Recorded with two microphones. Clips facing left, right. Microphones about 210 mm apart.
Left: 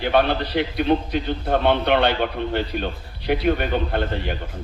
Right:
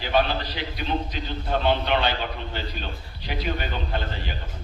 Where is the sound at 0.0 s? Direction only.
60° left (ahead or behind).